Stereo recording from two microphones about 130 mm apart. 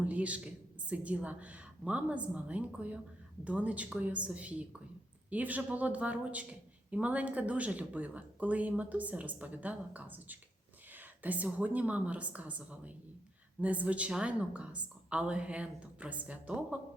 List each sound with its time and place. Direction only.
0.0 s speech: 10° right (ahead or behind)